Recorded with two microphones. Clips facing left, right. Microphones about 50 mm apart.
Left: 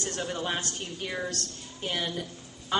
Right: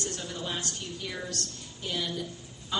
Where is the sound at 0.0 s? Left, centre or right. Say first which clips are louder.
Left 4 dB; left.